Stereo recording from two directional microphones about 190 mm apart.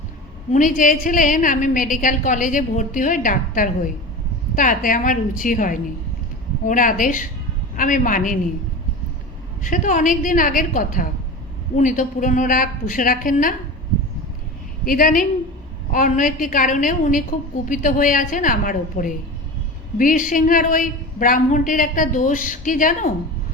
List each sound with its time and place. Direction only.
0.5 s a woman's voice: 45° left (ahead or behind)
9.6 s a woman's voice: 45° left (ahead or behind)
14.8 s a woman's voice: 45° left (ahead or behind)